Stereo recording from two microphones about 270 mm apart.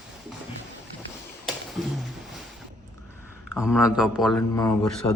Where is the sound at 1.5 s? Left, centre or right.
Centre.